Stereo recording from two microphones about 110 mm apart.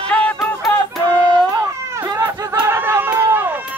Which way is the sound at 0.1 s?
10° left (ahead or behind).